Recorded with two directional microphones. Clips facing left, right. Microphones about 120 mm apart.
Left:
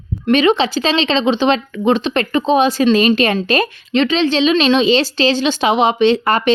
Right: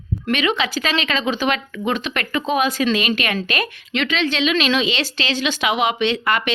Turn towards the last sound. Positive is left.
turn(degrees=35)  # may be behind; listen again after turning